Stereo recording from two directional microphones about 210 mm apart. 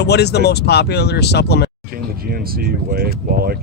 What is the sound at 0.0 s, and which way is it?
Speech, 50° left (ahead or behind).